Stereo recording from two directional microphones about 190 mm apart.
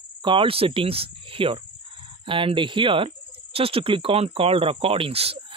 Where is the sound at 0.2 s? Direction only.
25° right (ahead or behind).